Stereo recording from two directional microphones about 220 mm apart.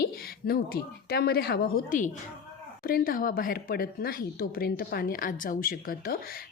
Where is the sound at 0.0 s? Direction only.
45° left (ahead or behind).